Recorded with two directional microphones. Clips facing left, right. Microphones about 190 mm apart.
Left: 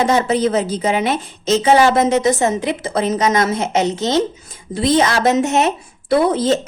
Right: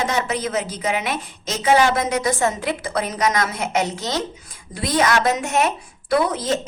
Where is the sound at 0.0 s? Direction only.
30° left (ahead or behind).